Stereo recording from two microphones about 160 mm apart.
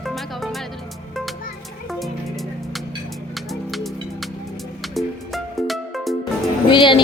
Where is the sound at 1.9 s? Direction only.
Centre (ahead or behind).